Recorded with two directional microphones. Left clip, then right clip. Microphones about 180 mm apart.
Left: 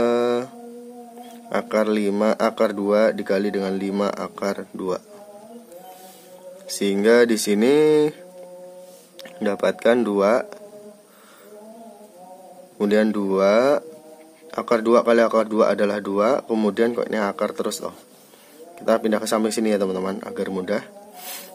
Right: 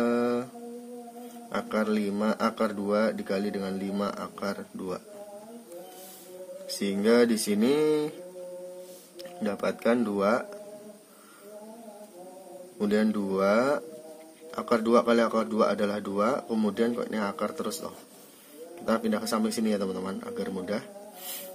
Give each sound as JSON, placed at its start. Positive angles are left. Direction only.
{"t": 0.0, "sound": "a sound", "side_deg": 35}
{"t": 1.5, "sound": "speech", "side_deg": 35}
{"t": 6.8, "sound": "speech", "side_deg": 35}
{"t": 9.4, "sound": "speech", "side_deg": 35}
{"t": 12.7, "sound": "speech", "side_deg": 35}